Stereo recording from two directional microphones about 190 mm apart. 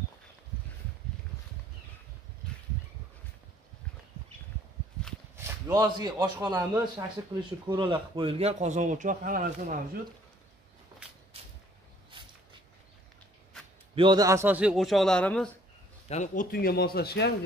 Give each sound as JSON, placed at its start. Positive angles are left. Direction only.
{"t": 5.3, "sound": "a man's voice", "side_deg": -15}
{"t": 13.9, "sound": "a man's voice", "side_deg": -25}
{"t": 16.1, "sound": "speech", "side_deg": 40}